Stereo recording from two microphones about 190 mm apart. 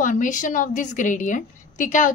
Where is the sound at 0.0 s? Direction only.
45° left (ahead or behind).